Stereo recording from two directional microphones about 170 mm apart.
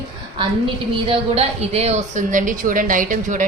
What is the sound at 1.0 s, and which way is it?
A woman's voice, 35° right (ahead or behind).